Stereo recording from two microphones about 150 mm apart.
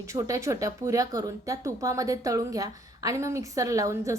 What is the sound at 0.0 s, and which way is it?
A woman's voice, 20° right (ahead or behind).